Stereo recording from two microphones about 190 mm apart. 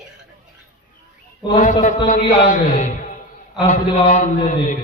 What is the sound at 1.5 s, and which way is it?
A man's voice, 40° left (ahead or behind).